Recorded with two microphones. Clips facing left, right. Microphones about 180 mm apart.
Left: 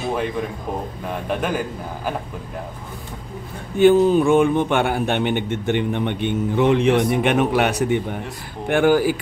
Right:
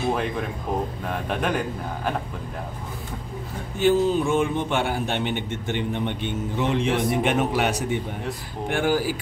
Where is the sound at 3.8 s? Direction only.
55° left (ahead or behind).